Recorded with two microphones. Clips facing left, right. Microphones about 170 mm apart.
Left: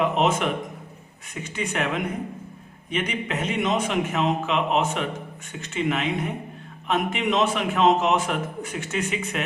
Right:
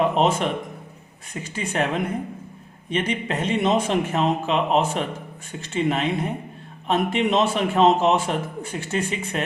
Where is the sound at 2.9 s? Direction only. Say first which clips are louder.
Right 3 dB; 30° right (ahead or behind).